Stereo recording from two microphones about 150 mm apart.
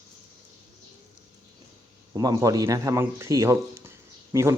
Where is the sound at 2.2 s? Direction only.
25° right (ahead or behind).